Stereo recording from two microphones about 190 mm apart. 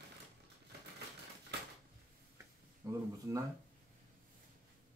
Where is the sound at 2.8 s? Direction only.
20° right (ahead or behind).